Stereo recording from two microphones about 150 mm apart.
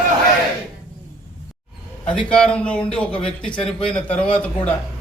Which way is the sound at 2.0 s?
5° left (ahead or behind).